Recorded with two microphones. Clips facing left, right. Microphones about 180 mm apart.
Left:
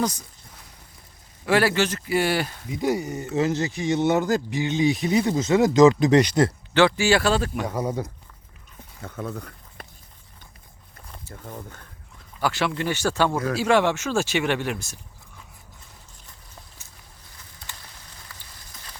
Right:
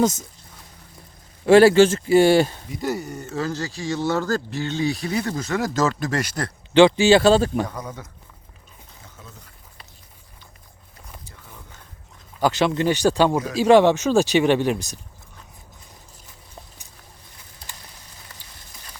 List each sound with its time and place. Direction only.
0.0 s speech: 25° right (ahead or behind)
1.5 s speech: 25° right (ahead or behind)
2.8 s speech: 15° left (ahead or behind)
6.7 s speech: 20° right (ahead or behind)
7.7 s speech: 30° left (ahead or behind)
9.0 s speech: 60° left (ahead or behind)
12.4 s speech: 20° right (ahead or behind)